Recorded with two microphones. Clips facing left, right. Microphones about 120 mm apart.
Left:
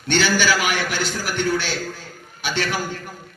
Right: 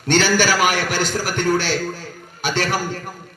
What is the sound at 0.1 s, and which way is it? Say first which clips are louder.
A man's voice: right 2 dB; 45° right (ahead or behind).